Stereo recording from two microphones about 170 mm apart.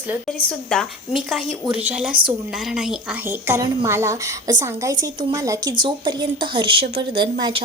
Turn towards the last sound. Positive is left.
turn(degrees=-30)  # may be behind; listen again after turning